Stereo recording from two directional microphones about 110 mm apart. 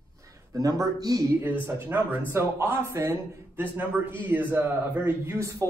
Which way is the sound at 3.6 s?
15° right (ahead or behind).